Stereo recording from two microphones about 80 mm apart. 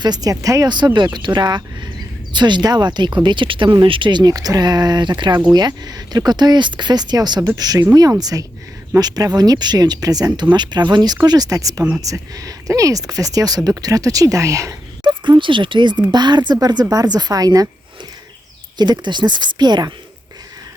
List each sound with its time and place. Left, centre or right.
0.0 s speech: right
0.9 s speech: right
4.2 s speech: right
7.4 s speech: right
11.3 s speech: right
15.0 s speech: right
16.1 s speech: right
18.8 s speech: right